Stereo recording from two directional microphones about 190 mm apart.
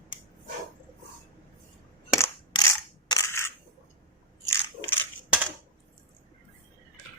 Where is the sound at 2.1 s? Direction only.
15° left (ahead or behind).